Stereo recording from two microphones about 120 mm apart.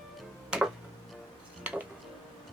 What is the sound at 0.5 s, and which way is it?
Tick-tock, 10° right (ahead or behind).